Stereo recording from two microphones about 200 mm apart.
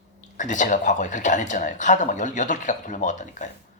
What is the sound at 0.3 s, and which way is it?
Speech, 40° left (ahead or behind).